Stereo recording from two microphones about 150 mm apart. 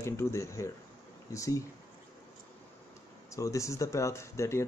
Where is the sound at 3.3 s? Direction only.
20° left (ahead or behind).